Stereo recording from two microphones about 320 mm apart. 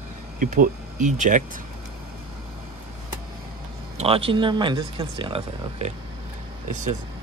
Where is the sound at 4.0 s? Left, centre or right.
Centre.